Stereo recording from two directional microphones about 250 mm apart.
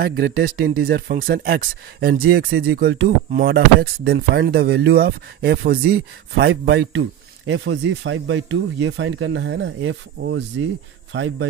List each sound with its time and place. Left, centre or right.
0.0 s a man's voice: right